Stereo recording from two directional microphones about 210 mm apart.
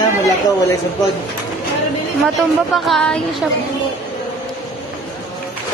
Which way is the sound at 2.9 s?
Centre (ahead or behind).